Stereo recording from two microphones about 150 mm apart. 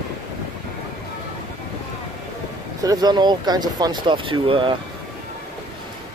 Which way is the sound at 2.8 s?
25° right (ahead or behind).